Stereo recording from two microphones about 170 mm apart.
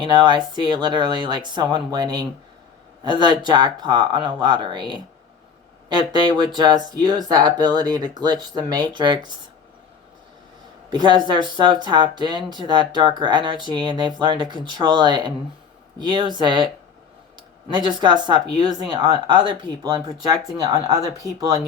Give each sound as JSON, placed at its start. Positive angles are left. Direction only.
{"t": 0.0, "sound": "speech", "side_deg": -25}
{"t": 10.8, "sound": "speech", "side_deg": -25}
{"t": 17.7, "sound": "speech", "side_deg": -25}